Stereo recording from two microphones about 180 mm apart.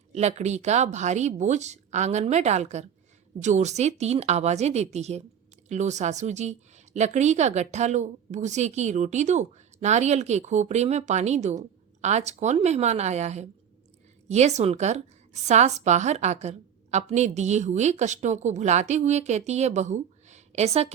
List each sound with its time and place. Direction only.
0.1 s a woman's voice: 40° right (ahead or behind)